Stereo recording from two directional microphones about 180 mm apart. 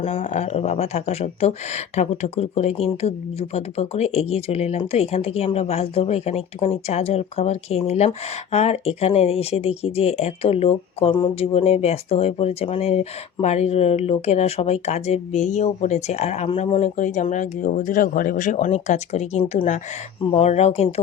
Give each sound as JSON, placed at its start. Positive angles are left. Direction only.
{"t": 0.2, "sound": "speech", "side_deg": 40}